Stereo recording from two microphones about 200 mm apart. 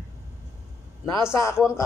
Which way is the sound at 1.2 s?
15° left (ahead or behind).